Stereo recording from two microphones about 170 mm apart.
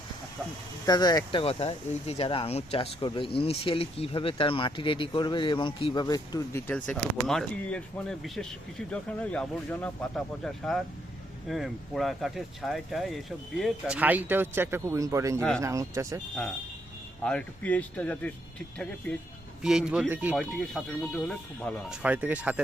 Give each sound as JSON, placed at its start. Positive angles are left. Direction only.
{"t": 0.9, "sound": "speech", "side_deg": 25}
{"t": 6.7, "sound": "speech", "side_deg": 10}
{"t": 15.4, "sound": "speech", "side_deg": 5}
{"t": 15.6, "sound": "speech", "side_deg": -20}
{"t": 17.2, "sound": "speech", "side_deg": 10}
{"t": 19.6, "sound": "speech", "side_deg": -5}
{"t": 22.0, "sound": "speech", "side_deg": -10}